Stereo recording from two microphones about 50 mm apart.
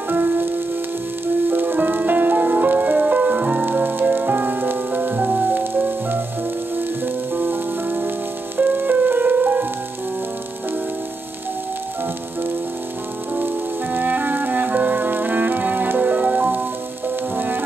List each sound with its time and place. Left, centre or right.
1.2 s music: right
7.3 s music: right
13.9 s music: right